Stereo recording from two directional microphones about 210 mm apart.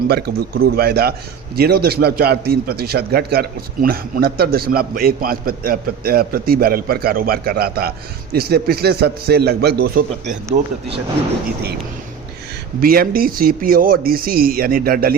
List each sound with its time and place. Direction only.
0.1 s a man's voice: 50° right (ahead or behind)
10.5 s speech: 25° right (ahead or behind)
12.8 s a man's voice: 45° right (ahead or behind)